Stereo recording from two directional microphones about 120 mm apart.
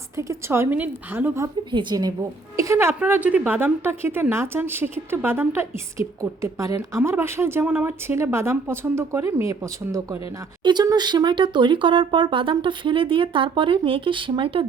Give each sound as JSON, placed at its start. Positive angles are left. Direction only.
{"t": 0.2, "sound": "speech", "side_deg": -25}
{"t": 1.7, "sound": "a woman's voice", "side_deg": -40}
{"t": 2.6, "sound": "speech", "side_deg": -25}
{"t": 10.6, "sound": "speech", "side_deg": -40}